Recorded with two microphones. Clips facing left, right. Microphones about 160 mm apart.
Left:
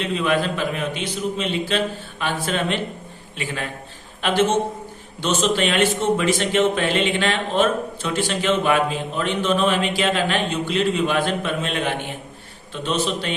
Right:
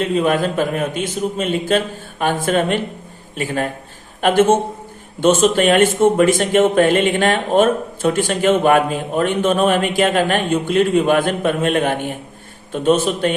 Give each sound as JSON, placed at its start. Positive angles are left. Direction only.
{"t": 0.0, "sound": "speech", "side_deg": -45}